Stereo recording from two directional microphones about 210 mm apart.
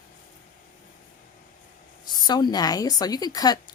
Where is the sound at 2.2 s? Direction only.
20° left (ahead or behind).